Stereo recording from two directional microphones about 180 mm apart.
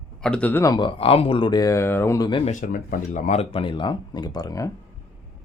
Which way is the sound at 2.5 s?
50° left (ahead or behind).